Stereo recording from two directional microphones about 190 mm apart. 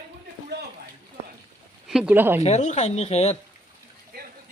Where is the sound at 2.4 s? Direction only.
35° left (ahead or behind).